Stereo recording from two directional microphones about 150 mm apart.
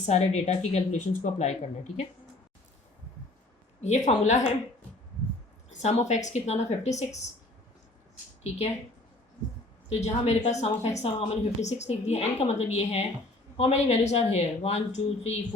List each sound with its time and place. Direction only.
0.0 s a woman's voice: 50° left (ahead or behind)
3.8 s a woman's voice: 50° left (ahead or behind)
5.8 s a woman's voice: 50° left (ahead or behind)
9.9 s a woman's voice: 45° left (ahead or behind)